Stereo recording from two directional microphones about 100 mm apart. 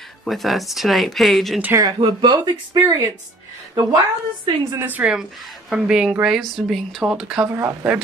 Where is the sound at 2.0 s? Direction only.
50° right (ahead or behind).